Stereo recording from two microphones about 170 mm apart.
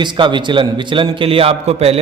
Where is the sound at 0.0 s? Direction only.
25° right (ahead or behind).